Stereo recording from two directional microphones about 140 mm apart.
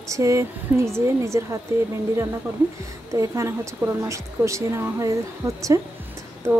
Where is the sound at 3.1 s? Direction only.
20° right (ahead or behind).